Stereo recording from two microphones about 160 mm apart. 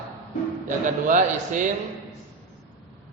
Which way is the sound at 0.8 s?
55° right (ahead or behind).